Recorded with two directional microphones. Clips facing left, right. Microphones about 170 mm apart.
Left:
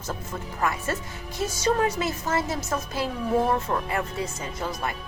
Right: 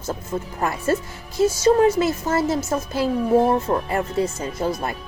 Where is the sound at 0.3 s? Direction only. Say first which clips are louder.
Right 8 dB; 30° right (ahead or behind).